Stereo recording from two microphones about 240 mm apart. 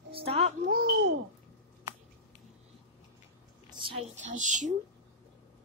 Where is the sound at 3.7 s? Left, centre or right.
Right.